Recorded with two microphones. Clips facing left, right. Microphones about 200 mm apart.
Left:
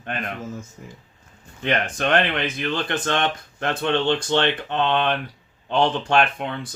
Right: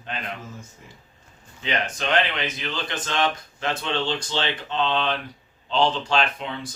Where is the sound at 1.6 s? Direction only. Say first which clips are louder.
Left 4 dB; 55° left (ahead or behind).